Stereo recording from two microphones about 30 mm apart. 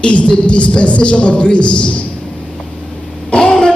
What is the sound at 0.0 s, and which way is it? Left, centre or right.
Speech, left.